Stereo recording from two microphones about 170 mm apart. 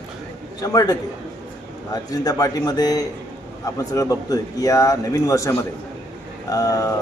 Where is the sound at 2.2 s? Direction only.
20° left (ahead or behind).